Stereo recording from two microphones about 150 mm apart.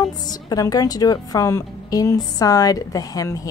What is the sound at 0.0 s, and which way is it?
Speech, 25° left (ahead or behind).